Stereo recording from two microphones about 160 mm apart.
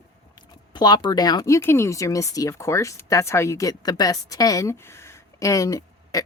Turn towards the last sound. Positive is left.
turn(degrees=20)  # may be behind; listen again after turning